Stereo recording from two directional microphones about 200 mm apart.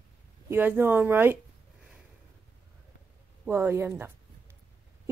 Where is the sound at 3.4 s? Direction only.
10° right (ahead or behind).